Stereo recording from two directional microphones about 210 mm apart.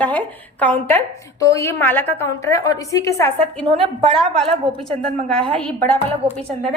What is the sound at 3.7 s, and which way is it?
Speech, 25° right (ahead or behind).